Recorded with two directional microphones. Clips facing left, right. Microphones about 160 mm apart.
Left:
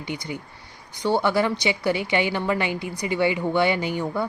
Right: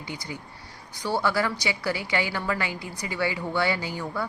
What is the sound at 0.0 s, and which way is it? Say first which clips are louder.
A woman's voice: left 5 dB; 20° left (ahead or behind).